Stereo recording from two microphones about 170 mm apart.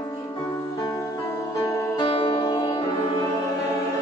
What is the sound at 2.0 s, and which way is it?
Music, 25° left (ahead or behind).